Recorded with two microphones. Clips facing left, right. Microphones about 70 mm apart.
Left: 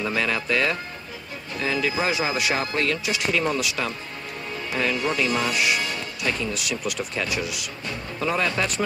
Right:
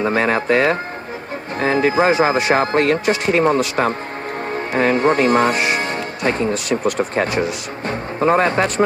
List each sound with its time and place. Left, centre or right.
0.0 s speech: right